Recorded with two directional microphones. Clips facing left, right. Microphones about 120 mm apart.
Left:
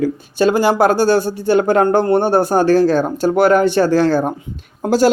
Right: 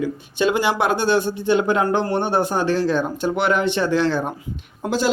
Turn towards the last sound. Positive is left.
turn(degrees=45)  # may be behind; listen again after turning